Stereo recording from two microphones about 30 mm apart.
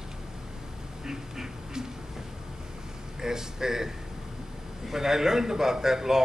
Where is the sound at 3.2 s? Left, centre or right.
Centre.